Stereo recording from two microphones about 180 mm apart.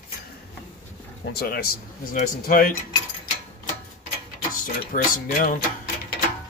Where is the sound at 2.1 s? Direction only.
50° left (ahead or behind).